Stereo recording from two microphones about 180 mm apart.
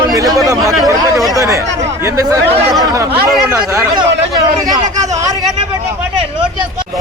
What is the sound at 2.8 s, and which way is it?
Speech, 20° right (ahead or behind).